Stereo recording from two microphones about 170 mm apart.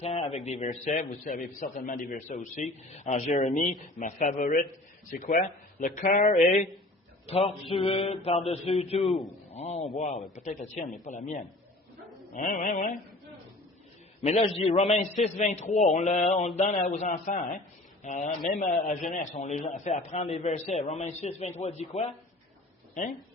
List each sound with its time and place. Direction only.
0.0 s a man's voice: 35° left (ahead or behind)
7.3 s a man's voice: 35° left (ahead or behind); by 13.0 s 50° left (ahead or behind)
14.2 s a man's voice: 40° left (ahead or behind)